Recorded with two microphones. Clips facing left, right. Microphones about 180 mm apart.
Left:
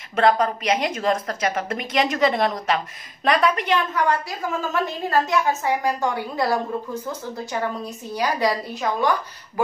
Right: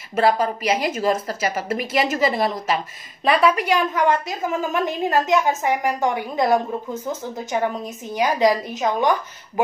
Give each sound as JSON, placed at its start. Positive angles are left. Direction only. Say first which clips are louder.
{"t": 0.1, "sound": "a woman's voice", "louder": "even", "side_deg": -5}